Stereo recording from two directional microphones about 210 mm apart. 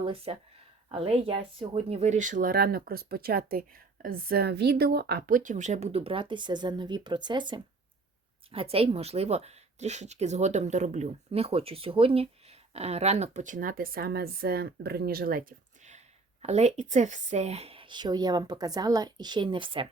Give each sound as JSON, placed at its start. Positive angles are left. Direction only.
{"t": 0.0, "sound": "speech", "side_deg": -25}